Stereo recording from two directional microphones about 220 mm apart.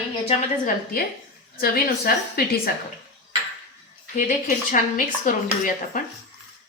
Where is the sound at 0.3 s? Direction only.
40° left (ahead or behind).